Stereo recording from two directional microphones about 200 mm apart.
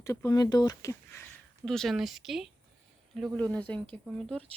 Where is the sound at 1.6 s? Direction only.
Centre (ahead or behind).